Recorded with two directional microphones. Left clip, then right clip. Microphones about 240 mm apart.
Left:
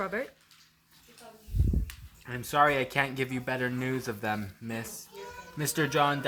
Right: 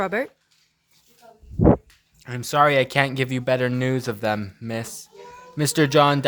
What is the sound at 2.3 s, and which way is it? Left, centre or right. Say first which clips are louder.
A woman's voice: right 6 dB; right.